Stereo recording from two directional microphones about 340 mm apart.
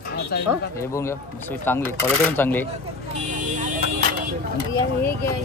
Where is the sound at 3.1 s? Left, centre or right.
Right.